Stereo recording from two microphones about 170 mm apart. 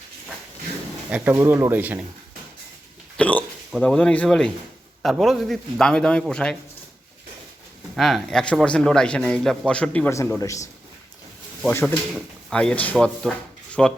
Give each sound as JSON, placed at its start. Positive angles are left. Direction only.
{"t": 1.1, "sound": "speech", "side_deg": -10}
{"t": 3.2, "sound": "a man's voice", "side_deg": 10}
{"t": 7.9, "sound": "a man's voice", "side_deg": 0}
{"t": 11.7, "sound": "a man's voice", "side_deg": 15}